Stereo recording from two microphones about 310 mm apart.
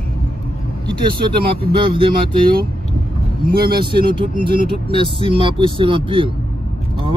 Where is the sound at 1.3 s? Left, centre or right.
Centre.